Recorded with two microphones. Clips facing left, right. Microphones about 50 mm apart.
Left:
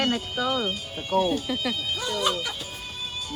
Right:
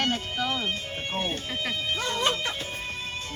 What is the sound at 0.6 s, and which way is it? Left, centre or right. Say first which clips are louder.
Speech: left 1 dB; right.